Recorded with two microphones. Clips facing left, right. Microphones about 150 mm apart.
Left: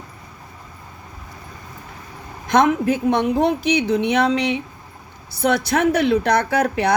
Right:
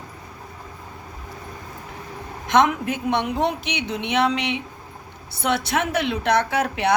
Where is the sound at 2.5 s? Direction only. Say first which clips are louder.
Left 3 dB; 35° left (ahead or behind).